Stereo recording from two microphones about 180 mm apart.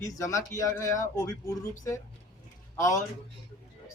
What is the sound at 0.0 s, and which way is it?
Speech, 15° left (ahead or behind).